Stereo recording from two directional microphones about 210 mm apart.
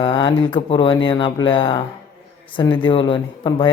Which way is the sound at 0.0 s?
20° left (ahead or behind).